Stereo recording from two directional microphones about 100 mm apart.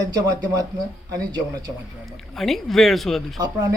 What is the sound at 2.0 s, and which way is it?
Speech, centre (ahead or behind).